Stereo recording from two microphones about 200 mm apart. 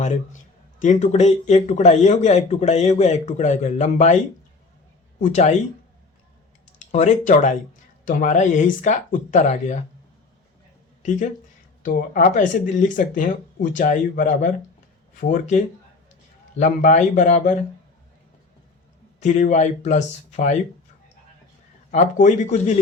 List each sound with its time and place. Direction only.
0.0 s speech: 40° left (ahead or behind)
5.2 s speech: 35° left (ahead or behind)
6.7 s speech: 35° left (ahead or behind)
11.8 s speech: 40° left (ahead or behind)
19.2 s speech: 35° left (ahead or behind)
21.9 s speech: 35° left (ahead or behind)